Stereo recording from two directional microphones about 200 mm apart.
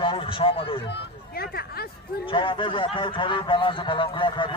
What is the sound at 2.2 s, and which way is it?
A man's voice, 25° left (ahead or behind).